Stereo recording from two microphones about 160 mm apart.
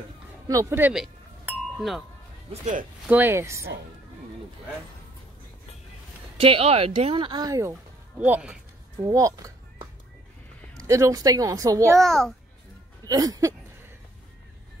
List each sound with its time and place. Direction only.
0.5 s speech: 20° right (ahead or behind)
1.8 s a child's voice: centre (ahead or behind)
2.6 s speech: 55° right (ahead or behind)
3.1 s speech: 15° right (ahead or behind)
6.3 s speech: 35° right (ahead or behind)
8.2 s speech: 10° right (ahead or behind)
9.0 s speech: 20° right (ahead or behind)
10.8 s speech: 20° right (ahead or behind)
11.9 s a child's voice: centre (ahead or behind)
13.0 s speech: 25° right (ahead or behind)